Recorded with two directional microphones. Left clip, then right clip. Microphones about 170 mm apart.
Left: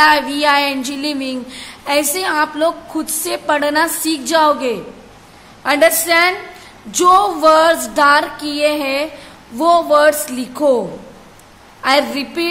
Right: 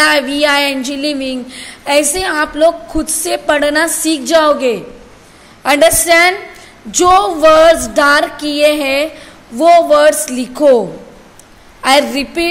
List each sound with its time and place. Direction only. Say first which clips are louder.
0.0 s a woman's voice: right 1 dB; 10° right (ahead or behind)
11.8 s a woman's voice: right 4 dB; 15° right (ahead or behind)